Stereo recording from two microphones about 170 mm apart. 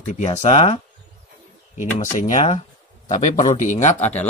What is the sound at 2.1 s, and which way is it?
Speech, 40° left (ahead or behind).